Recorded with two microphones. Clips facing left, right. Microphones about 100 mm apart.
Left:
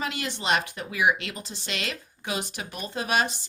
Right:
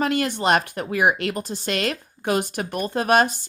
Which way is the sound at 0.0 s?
50° right (ahead or behind).